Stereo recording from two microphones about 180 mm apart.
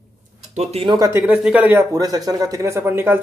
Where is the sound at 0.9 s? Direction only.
20° right (ahead or behind).